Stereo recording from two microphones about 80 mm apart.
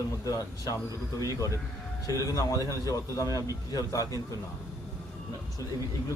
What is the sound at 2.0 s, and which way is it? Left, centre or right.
A man's voice, left.